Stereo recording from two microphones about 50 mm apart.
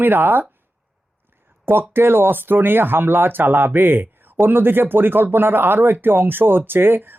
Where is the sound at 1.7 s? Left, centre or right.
Right.